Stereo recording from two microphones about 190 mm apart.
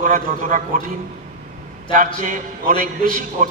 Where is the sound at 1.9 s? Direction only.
45° right (ahead or behind).